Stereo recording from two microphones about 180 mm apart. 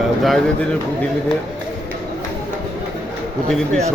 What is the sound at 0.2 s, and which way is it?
Speech, centre (ahead or behind).